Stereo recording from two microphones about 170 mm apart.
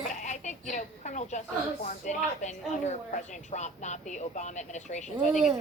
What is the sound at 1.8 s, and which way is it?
Speech, 45° left (ahead or behind).